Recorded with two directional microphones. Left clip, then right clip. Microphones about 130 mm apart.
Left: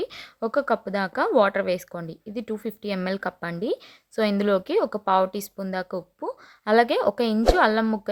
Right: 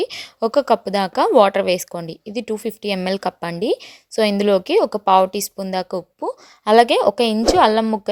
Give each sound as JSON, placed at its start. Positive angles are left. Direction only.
{"t": 0.0, "sound": "a woman's voice", "side_deg": -40}